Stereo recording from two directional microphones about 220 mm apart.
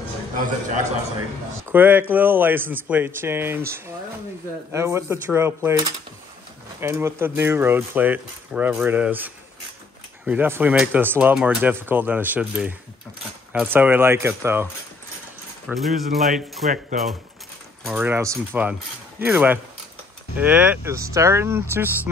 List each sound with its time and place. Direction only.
1.7 s speech: 10° right (ahead or behind)
15.6 s speech: centre (ahead or behind)
17.8 s speech: 10° right (ahead or behind)